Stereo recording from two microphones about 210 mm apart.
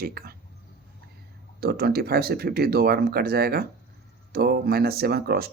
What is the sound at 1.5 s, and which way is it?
Speech, 45° right (ahead or behind).